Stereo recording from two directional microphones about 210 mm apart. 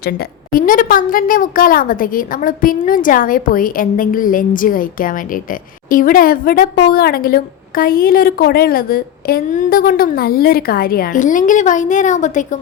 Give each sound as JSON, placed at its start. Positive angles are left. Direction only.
{"t": 0.0, "sound": "a woman's voice", "side_deg": 45}